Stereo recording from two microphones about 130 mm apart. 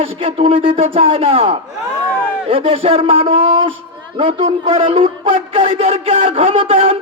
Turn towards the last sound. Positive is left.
turn(degrees=-50)  # may be behind; listen again after turning